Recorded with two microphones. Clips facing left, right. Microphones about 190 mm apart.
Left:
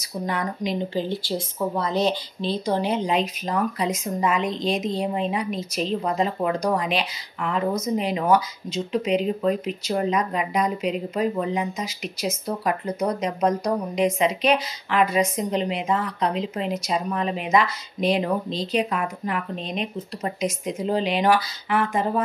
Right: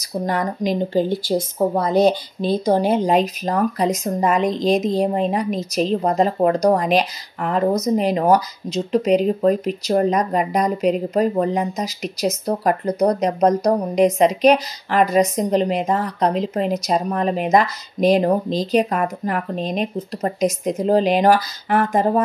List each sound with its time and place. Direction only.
0.0 s speech: 40° right (ahead or behind)